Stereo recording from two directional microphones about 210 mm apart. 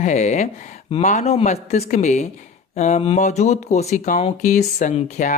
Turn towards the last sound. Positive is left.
turn(degrees=35)  # may be behind; listen again after turning